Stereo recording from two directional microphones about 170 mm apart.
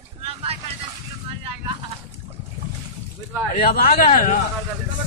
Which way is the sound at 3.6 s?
60° left (ahead or behind).